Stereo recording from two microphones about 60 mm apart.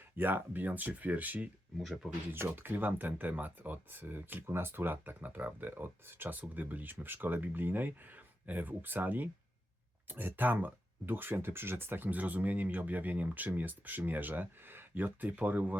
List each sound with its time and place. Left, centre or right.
0.2 s speech: right
1.8 s speech: centre
2.3 s speech: right